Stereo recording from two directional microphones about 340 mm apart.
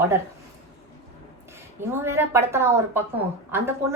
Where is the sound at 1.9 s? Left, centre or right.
Centre.